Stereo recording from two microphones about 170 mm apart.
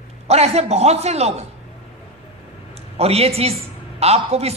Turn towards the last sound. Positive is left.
turn(degrees=-35)  # may be behind; listen again after turning